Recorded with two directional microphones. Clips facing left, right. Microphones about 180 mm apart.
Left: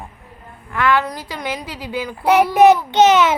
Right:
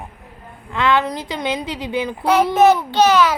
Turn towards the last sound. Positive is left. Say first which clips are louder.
# left 2 dB
turn(degrees=20)  # may be behind; listen again after turning